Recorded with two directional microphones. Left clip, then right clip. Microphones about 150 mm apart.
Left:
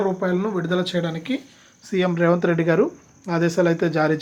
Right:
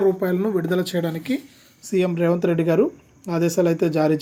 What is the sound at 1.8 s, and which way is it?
Speech, 30° right (ahead or behind).